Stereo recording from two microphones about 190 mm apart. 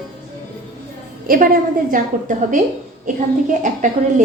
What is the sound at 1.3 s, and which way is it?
A woman's voice, 50° right (ahead or behind).